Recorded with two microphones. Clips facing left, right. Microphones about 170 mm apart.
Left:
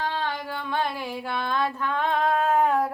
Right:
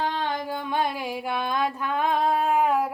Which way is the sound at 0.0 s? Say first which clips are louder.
Right 2 dB; 15° right (ahead or behind).